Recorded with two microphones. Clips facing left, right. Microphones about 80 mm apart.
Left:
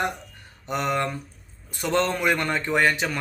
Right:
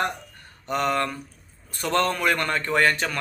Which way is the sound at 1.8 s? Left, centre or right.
Centre.